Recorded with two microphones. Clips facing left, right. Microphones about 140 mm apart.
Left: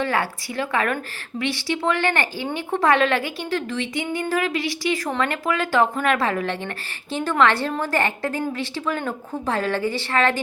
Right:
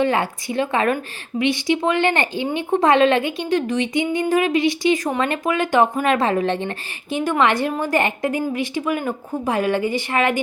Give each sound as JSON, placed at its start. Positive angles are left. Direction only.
{"t": 0.0, "sound": "speech", "side_deg": -20}